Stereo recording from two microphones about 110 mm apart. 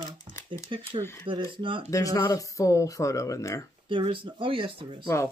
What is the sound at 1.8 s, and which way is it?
Speech, 30° left (ahead or behind).